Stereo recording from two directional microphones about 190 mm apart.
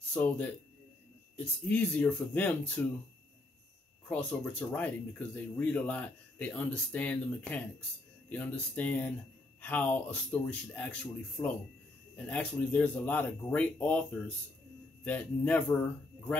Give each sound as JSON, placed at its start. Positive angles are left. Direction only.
{"t": 0.1, "sound": "speech", "side_deg": 10}
{"t": 4.1, "sound": "speech", "side_deg": 5}
{"t": 15.0, "sound": "speech", "side_deg": 10}